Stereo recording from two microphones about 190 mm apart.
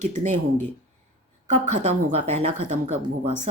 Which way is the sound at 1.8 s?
35° right (ahead or behind).